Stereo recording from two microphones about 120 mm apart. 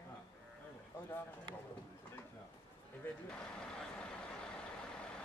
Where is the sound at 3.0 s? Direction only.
15° left (ahead or behind).